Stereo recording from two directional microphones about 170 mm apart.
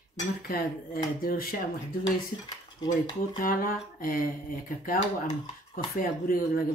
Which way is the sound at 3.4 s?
55° left (ahead or behind).